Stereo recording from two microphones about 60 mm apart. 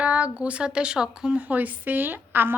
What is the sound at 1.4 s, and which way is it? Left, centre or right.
A woman's voice, right.